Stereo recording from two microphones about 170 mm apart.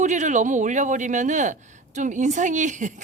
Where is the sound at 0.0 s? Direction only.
45° right (ahead or behind).